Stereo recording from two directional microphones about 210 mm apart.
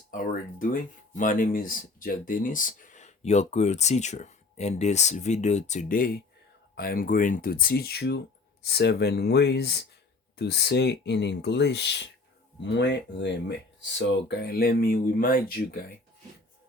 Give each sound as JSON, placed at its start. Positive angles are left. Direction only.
{"t": 0.6, "sound": "speech", "side_deg": 40}